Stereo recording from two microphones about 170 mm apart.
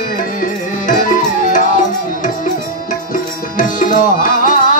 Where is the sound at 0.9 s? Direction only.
50° left (ahead or behind).